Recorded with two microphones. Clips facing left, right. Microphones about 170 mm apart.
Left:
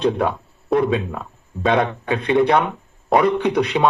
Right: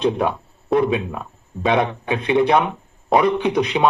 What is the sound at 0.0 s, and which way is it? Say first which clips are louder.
A man's voice: even; 15° right (ahead or behind).